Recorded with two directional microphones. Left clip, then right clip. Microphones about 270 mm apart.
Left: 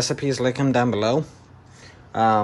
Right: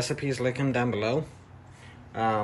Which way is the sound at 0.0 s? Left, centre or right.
Centre.